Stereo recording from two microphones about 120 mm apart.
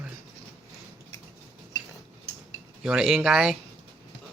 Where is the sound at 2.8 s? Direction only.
5° right (ahead or behind).